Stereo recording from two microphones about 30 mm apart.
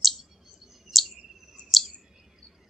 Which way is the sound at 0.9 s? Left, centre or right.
Centre.